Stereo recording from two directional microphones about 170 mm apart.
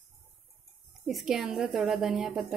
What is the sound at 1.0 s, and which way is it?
Speech, centre (ahead or behind).